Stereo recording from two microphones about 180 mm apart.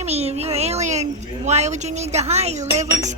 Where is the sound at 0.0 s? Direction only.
35° right (ahead or behind).